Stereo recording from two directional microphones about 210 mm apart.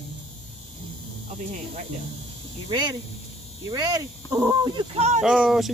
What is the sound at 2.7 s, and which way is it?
Speech, 20° right (ahead or behind).